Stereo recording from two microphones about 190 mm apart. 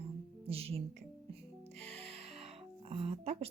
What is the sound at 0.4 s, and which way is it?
Speech, 30° right (ahead or behind).